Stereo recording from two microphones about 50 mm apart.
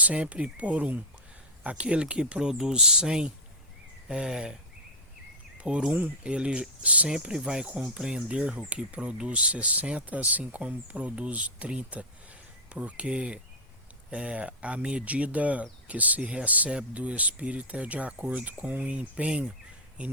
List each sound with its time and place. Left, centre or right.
0.0 s speech: right
5.5 s speech: centre
7.1 s speech: centre